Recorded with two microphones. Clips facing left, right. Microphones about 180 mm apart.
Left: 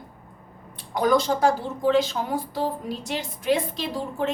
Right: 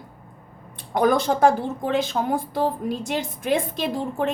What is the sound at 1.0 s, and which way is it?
A woman's voice, 55° right (ahead or behind).